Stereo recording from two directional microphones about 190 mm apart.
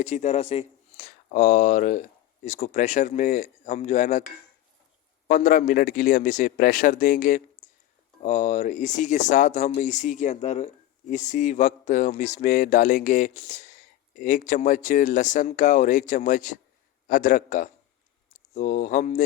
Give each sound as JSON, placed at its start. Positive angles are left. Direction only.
{"t": 0.0, "sound": "speech", "side_deg": 40}
{"t": 5.3, "sound": "speech", "side_deg": 45}